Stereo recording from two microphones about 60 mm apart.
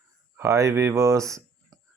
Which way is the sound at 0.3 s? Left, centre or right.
Right.